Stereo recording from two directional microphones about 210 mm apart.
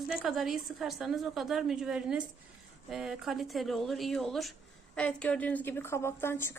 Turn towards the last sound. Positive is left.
turn(degrees=10)  # may be behind; listen again after turning